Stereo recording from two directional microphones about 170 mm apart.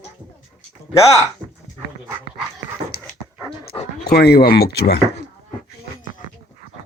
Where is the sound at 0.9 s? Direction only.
15° left (ahead or behind).